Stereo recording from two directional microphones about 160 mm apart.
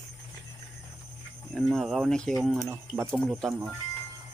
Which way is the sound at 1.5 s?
Centre (ahead or behind).